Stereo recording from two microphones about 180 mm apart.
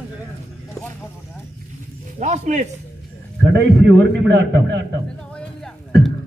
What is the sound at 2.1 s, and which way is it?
Speech, 40° right (ahead or behind).